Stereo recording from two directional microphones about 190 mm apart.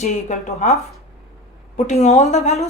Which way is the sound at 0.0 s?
40° left (ahead or behind).